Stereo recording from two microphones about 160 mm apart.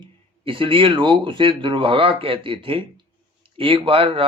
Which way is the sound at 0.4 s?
35° right (ahead or behind).